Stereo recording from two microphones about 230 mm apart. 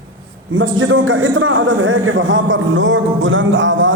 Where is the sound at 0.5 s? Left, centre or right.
Right.